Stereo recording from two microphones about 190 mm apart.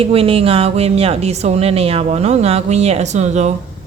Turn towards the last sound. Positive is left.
turn(degrees=-35)  # may be behind; listen again after turning